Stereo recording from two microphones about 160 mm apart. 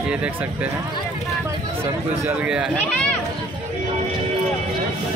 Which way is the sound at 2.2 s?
5° right (ahead or behind).